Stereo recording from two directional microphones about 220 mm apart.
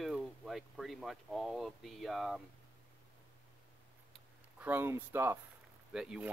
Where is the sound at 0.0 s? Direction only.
Centre (ahead or behind).